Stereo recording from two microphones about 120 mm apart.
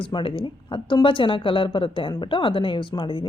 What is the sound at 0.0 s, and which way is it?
Speech, 45° left (ahead or behind).